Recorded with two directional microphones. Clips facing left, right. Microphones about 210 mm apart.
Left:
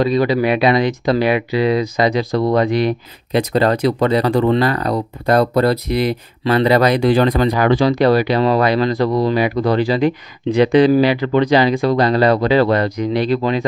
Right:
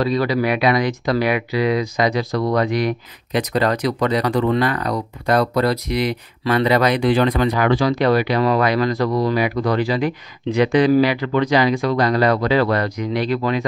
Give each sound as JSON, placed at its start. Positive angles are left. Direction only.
{"t": 0.0, "sound": "speech", "side_deg": 20}